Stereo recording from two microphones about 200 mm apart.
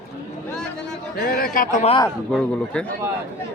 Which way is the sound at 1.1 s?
50° left (ahead or behind).